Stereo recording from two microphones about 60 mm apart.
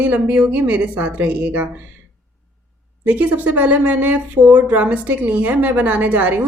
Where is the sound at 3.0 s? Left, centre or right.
Right.